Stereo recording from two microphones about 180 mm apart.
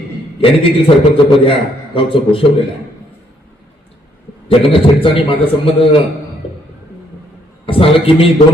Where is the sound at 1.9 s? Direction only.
30° left (ahead or behind).